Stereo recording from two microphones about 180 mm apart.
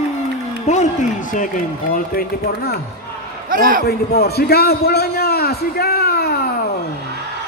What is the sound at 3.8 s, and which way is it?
A man's voice, 60° left (ahead or behind).